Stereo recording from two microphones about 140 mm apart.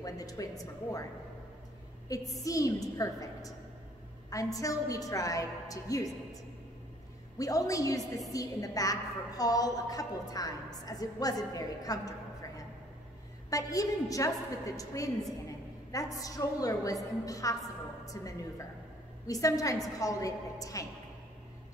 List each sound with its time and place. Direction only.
0.0 s a woman's voice: 25° left (ahead or behind)
2.0 s a woman's voice: 25° left (ahead or behind)
7.3 s a woman's voice: 25° left (ahead or behind)